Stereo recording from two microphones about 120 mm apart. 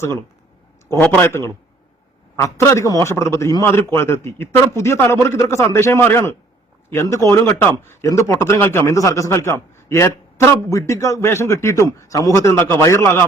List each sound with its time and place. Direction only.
1.2 s speech: 25° left (ahead or behind)